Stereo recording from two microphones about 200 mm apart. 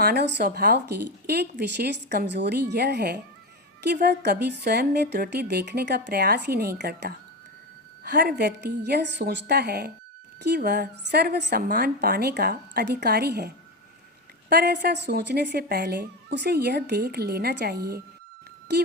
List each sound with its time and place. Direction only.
0.0 s a woman's voice: 55° right (ahead or behind)
14.5 s a woman's voice: 55° right (ahead or behind)